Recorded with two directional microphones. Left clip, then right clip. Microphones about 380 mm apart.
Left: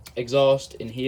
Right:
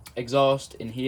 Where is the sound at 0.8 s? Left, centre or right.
Centre.